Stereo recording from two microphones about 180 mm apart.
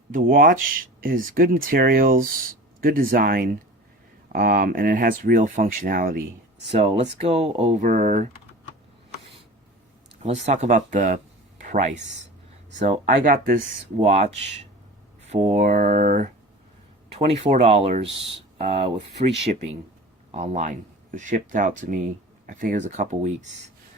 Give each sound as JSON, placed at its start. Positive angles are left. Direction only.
{"t": 0.1, "sound": "speech", "side_deg": -55}
{"t": 6.7, "sound": "speech", "side_deg": -40}
{"t": 10.2, "sound": "speech", "side_deg": -40}
{"t": 14.0, "sound": "speech", "side_deg": -35}
{"t": 15.3, "sound": "speech", "side_deg": -40}
{"t": 17.2, "sound": "speech", "side_deg": -35}